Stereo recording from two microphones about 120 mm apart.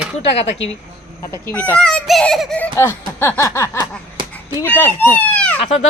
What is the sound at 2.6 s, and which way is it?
Speech, 20° left (ahead or behind).